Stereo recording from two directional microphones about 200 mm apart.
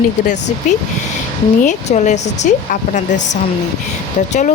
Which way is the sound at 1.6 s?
35° left (ahead or behind).